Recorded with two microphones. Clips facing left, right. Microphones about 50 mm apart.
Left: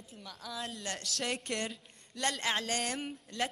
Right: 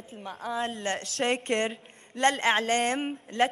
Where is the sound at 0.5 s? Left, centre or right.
Right.